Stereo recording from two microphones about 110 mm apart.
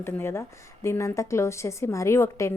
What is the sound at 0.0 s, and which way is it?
A woman's voice, 20° left (ahead or behind).